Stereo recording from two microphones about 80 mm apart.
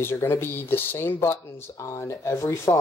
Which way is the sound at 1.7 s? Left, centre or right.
Left.